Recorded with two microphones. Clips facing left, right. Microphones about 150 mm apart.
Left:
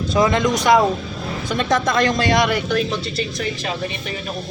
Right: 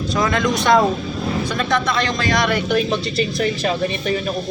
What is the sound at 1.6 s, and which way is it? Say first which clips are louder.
Speech: left 4 dB; 40° left (ahead or behind).